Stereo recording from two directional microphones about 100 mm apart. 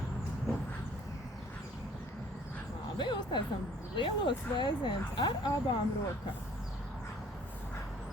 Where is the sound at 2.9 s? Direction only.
50° left (ahead or behind).